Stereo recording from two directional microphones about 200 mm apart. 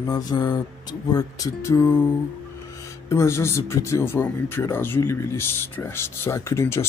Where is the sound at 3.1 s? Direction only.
15° left (ahead or behind).